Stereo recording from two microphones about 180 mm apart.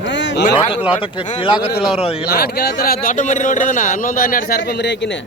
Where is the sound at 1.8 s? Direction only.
5° right (ahead or behind).